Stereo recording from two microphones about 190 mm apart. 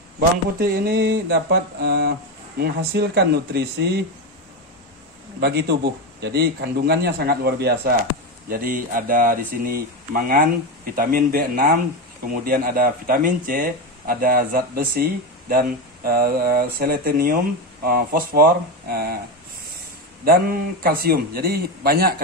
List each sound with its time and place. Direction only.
0.6 s a man's voice: 55° right (ahead or behind)
5.4 s a man's voice: 60° right (ahead or behind)
20.2 s speech: 50° right (ahead or behind)